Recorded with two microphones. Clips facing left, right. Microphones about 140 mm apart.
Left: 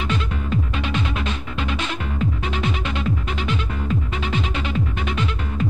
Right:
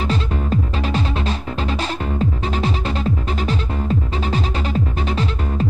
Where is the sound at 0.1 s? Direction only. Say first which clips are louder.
Right 3 dB; 35° right (ahead or behind).